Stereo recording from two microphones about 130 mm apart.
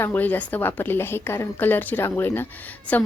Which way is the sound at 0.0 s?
15° left (ahead or behind).